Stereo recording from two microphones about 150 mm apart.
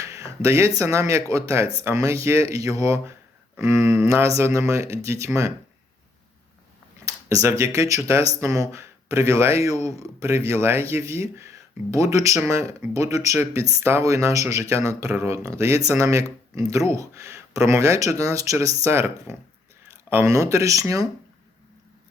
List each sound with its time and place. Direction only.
0.3 s speech: 20° right (ahead or behind)
7.0 s speech: 20° right (ahead or behind)